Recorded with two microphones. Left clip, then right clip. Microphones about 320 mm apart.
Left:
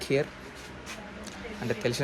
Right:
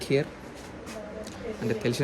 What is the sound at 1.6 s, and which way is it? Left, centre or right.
Speech, centre.